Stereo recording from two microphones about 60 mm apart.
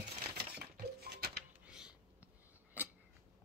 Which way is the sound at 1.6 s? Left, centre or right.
Centre.